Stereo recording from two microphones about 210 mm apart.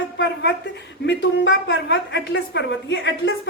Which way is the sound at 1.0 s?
55° left (ahead or behind).